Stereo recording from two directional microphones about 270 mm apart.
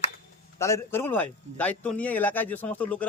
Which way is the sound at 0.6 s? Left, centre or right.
Centre.